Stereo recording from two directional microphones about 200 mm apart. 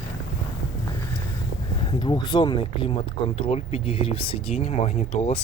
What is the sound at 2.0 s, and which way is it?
Speech, 20° left (ahead or behind).